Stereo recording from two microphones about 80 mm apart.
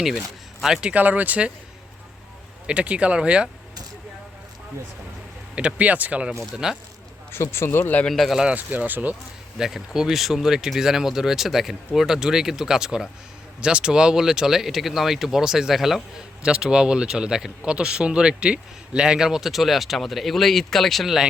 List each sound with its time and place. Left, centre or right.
0.6 s speech: centre
2.6 s speech: centre
5.5 s speech: centre
7.3 s speech: left
8.0 s speech: centre
8.5 s speech: right
9.6 s speech: centre